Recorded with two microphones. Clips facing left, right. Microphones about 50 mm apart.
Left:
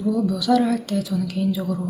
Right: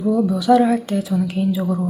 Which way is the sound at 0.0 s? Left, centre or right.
Right.